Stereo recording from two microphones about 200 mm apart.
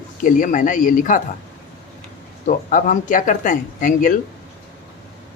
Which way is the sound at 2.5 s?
40° left (ahead or behind).